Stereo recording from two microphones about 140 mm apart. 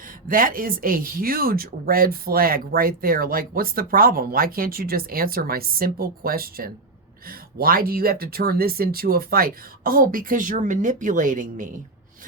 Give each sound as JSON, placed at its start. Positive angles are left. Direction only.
{"t": 0.3, "sound": "speech", "side_deg": -80}